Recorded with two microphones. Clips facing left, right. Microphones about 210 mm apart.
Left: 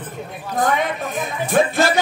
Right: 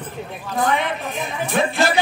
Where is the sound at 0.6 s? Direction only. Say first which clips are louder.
Left 1 dB; 45° left (ahead or behind).